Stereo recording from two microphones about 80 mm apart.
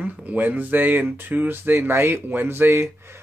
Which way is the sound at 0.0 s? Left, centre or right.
Centre.